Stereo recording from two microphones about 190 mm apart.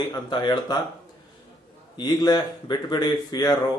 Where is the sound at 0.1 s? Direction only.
20° left (ahead or behind).